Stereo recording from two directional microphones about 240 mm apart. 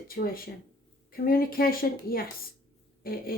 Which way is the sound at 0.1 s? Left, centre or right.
Left.